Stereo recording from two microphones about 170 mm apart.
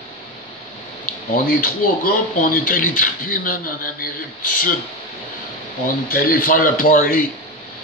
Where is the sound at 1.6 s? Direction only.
55° left (ahead or behind).